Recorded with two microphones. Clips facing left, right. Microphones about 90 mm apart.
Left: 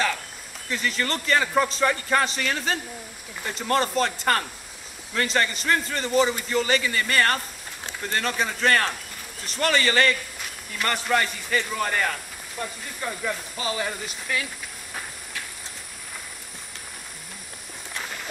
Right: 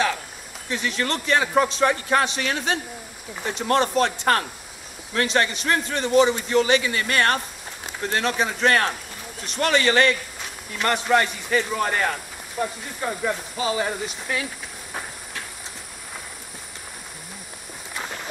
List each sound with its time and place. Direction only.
0.7 s a man's voice: centre (ahead or behind)
13.0 s speech: 15° right (ahead or behind)
13.6 s speech: 5° right (ahead or behind)
17.9 s a sound: 15° right (ahead or behind)